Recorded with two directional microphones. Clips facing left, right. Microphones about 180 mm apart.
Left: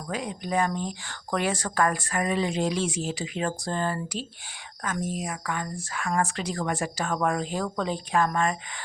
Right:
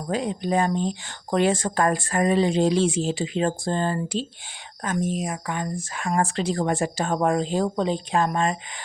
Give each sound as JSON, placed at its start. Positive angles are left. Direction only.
{"t": 0.1, "sound": "speech", "side_deg": -30}